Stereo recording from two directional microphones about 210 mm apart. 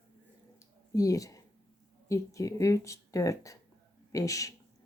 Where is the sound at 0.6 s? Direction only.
15° left (ahead or behind).